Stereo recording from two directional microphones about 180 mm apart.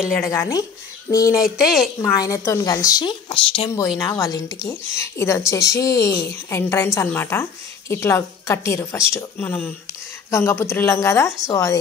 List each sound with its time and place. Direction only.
0.3 s a woman's voice: 15° left (ahead or behind)